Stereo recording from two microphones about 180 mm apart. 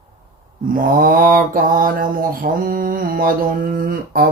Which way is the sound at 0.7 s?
50° right (ahead or behind).